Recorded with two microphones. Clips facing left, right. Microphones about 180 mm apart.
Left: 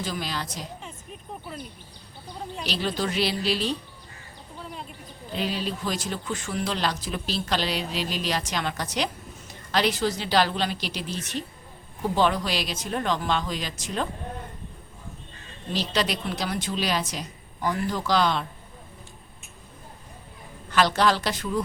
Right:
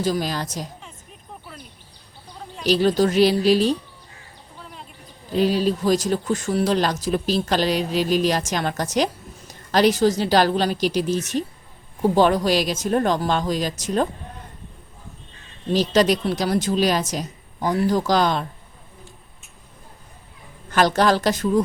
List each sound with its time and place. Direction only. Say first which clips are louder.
0.0 s speech: right 8 dB; 40° right (ahead or behind)
2.6 s speech: right 11 dB; 40° right (ahead or behind)
5.3 s speech: right 10 dB; 40° right (ahead or behind)
15.7 s speech: right 9 dB; 45° right (ahead or behind)
20.7 s speech: right 4 dB; 45° right (ahead or behind)